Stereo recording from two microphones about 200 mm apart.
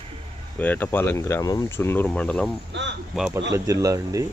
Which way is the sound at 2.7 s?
65° right (ahead or behind).